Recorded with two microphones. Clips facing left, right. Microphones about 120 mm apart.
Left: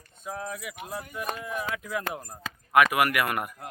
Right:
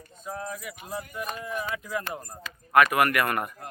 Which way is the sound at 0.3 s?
Centre (ahead or behind).